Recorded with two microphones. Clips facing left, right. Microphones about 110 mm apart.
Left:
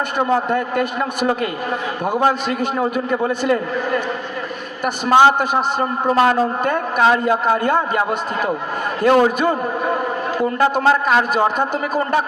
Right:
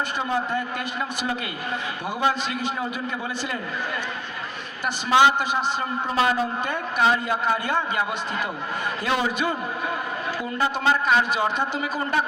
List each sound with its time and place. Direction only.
0.2 s a man's voice: 55° left (ahead or behind)
5.0 s a man's voice: 50° left (ahead or behind)